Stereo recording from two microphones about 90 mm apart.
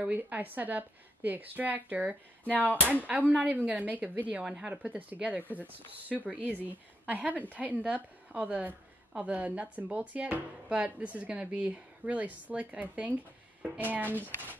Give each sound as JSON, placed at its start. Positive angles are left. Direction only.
{"t": 0.0, "sound": "a woman's voice", "side_deg": -20}